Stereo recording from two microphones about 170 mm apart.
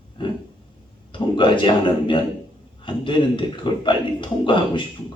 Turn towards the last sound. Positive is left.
turn(degrees=30)  # may be behind; listen again after turning